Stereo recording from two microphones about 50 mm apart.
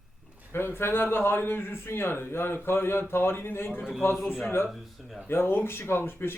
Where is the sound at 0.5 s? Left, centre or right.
Left.